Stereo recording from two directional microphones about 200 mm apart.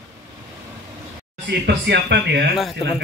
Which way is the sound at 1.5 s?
60° right (ahead or behind).